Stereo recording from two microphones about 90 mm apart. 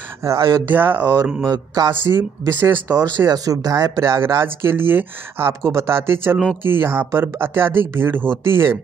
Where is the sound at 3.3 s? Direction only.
45° right (ahead or behind).